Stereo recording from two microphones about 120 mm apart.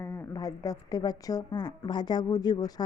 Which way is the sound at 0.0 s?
25° left (ahead or behind).